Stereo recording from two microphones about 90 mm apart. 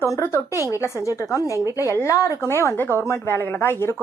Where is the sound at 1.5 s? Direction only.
35° right (ahead or behind).